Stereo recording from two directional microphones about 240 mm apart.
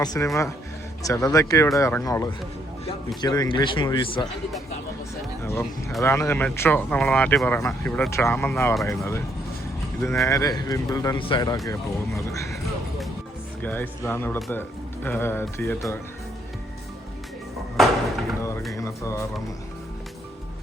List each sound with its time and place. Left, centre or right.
0.0 s speech: centre
5.4 s music: centre
6.0 s speech: centre
10.2 s speech: centre
13.6 s speech: centre
17.7 s a sound: centre
18.7 s speech: centre